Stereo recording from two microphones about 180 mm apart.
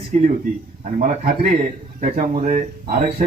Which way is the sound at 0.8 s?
50° right (ahead or behind).